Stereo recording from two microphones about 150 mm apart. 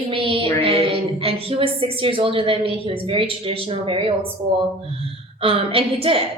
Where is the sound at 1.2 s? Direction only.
40° right (ahead or behind).